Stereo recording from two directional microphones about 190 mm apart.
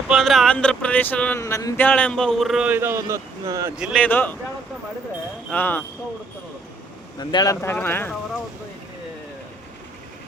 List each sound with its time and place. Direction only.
0.1 s speech: centre (ahead or behind); by 3.7 s 15° right (ahead or behind)
3.8 s speech: 5° right (ahead or behind)
4.0 s speech: 10° left (ahead or behind)
5.5 s speech: 10° left (ahead or behind)
7.2 s speech: 20° left (ahead or behind)